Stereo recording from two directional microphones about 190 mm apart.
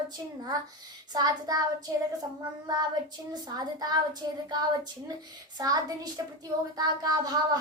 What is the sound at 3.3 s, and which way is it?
A child's voice, 20° right (ahead or behind).